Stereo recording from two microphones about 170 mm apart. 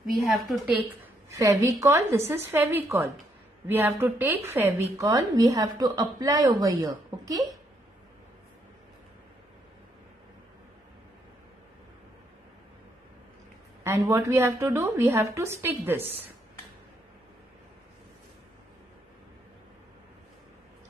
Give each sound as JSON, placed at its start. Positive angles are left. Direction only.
{"t": 0.3, "sound": "a woman's voice", "side_deg": 0}
{"t": 1.4, "sound": "a woman's voice", "side_deg": -20}
{"t": 13.8, "sound": "a woman's voice", "side_deg": -15}